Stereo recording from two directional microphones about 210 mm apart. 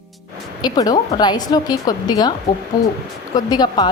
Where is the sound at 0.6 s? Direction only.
20° left (ahead or behind).